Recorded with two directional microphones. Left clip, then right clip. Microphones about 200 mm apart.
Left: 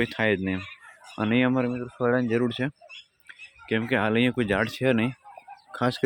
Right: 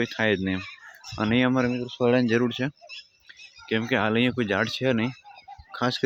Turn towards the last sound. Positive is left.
turn(degrees=5)  # may be behind; listen again after turning